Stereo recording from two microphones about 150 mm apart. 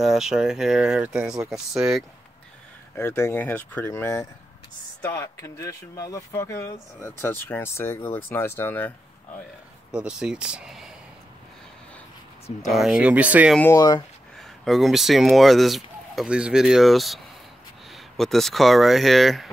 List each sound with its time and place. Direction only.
0.0 s speech: centre (ahead or behind)
3.0 s speech: 15° left (ahead or behind)
9.8 s speech: 5° right (ahead or behind)
12.7 s speech: 5° right (ahead or behind)
13.7 s speech: 25° left (ahead or behind)
14.6 s speech: centre (ahead or behind)